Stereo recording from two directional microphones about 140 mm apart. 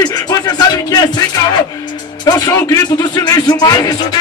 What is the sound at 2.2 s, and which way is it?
Speech, 30° left (ahead or behind).